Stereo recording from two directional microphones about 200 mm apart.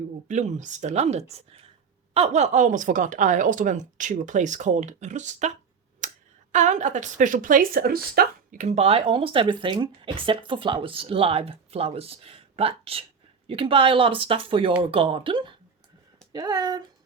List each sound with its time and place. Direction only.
0.3 s a woman's voice: 35° right (ahead or behind)
6.0 s a sound: 40° right (ahead or behind)
6.5 s speech: 35° right (ahead or behind); by 16.8 s 20° right (ahead or behind)